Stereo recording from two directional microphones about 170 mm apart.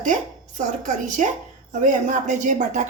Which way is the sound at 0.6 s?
45° right (ahead or behind).